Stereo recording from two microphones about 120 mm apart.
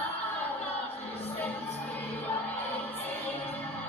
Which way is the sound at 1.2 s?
15° left (ahead or behind).